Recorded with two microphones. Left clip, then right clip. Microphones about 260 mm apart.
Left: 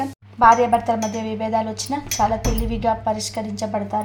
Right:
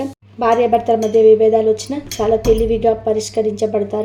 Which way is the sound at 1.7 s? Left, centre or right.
Left.